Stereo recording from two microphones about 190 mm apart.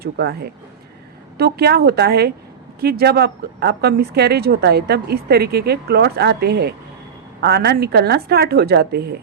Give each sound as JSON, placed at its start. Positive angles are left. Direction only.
{"t": 0.0, "sound": "a woman's voice", "side_deg": -55}